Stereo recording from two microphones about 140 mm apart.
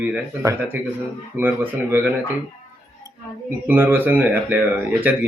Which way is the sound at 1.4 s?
15° right (ahead or behind).